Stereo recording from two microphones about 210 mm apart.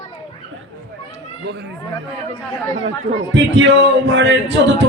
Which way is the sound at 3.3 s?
60° right (ahead or behind).